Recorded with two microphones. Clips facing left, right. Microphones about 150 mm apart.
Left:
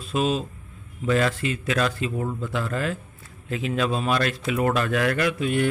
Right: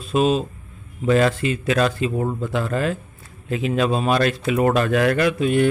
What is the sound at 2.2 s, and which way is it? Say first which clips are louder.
Speech: right 5 dB; 40° right (ahead or behind).